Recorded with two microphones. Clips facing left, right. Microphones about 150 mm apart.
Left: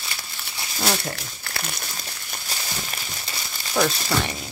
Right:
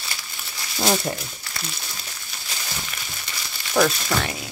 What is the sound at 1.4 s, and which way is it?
Speech, 60° left (ahead or behind).